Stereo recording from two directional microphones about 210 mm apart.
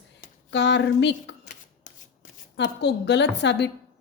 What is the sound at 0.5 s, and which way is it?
Speech, 55° left (ahead or behind).